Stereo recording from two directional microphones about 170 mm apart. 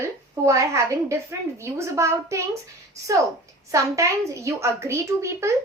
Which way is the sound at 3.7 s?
20° right (ahead or behind).